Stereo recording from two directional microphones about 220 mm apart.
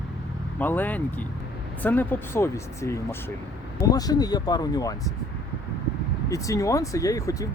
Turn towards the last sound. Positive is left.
turn(degrees=15)  # may be behind; listen again after turning